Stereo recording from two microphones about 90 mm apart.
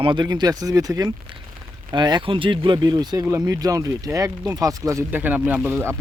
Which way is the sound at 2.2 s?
70° right (ahead or behind).